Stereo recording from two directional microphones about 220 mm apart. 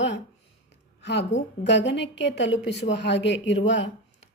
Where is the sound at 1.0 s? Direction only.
50° left (ahead or behind).